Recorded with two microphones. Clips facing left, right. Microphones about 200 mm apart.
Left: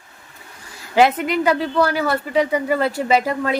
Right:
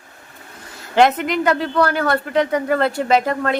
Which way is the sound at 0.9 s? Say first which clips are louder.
Even; 5° left (ahead or behind).